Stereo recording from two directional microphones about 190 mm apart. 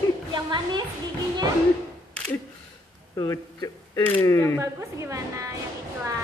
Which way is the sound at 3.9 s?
10° left (ahead or behind).